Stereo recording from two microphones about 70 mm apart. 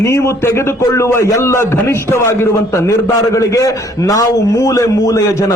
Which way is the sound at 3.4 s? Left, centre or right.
Left.